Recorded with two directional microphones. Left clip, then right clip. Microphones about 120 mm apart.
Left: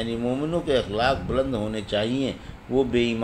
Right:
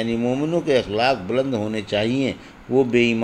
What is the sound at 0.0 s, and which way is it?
A man's voice, 25° right (ahead or behind).